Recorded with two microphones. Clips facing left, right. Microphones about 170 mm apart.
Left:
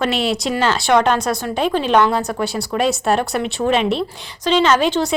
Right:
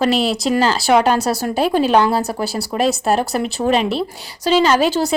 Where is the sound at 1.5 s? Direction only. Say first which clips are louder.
Right 1 dB; 5° right (ahead or behind).